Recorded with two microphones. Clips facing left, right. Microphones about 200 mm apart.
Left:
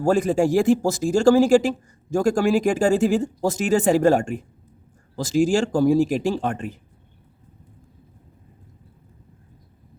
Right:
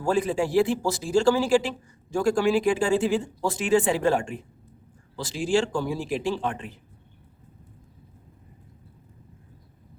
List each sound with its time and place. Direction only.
0.0 s speech: 45° left (ahead or behind)